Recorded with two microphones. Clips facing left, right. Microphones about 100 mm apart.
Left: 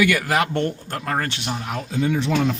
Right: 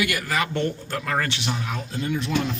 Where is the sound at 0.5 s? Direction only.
50° left (ahead or behind).